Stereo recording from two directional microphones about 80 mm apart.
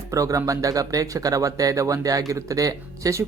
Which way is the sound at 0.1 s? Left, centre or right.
Right.